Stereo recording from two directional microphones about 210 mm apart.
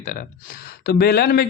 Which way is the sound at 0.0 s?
35° left (ahead or behind).